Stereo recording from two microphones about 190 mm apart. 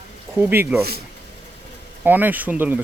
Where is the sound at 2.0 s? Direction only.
10° right (ahead or behind).